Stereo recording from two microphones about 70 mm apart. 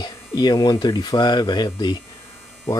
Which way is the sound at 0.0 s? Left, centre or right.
Left.